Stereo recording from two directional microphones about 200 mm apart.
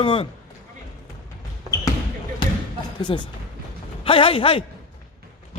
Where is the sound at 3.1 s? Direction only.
25° left (ahead or behind).